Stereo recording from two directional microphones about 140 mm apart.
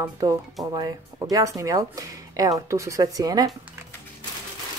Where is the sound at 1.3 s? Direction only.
25° right (ahead or behind).